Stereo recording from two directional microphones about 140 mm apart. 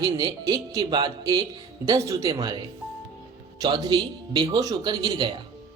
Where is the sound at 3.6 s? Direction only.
30° right (ahead or behind).